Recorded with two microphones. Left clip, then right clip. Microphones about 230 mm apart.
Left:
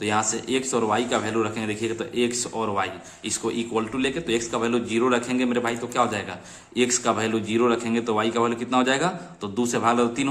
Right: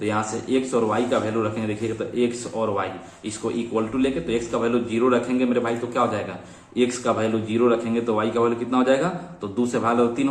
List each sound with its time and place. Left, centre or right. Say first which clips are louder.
0.0 s a man's voice: left 1 dB; left